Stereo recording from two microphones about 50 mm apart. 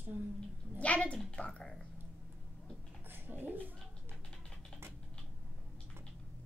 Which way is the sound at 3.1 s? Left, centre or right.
Right.